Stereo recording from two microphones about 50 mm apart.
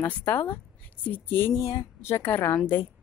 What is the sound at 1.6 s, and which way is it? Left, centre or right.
Speech, left.